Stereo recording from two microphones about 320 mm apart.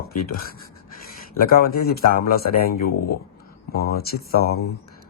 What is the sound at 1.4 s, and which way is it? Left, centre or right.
Speech, left.